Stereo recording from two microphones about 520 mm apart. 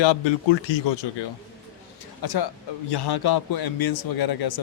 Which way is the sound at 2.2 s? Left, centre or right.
Left.